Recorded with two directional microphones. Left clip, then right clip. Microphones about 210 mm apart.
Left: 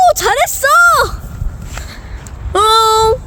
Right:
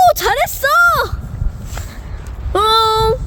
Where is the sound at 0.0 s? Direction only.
5° right (ahead or behind).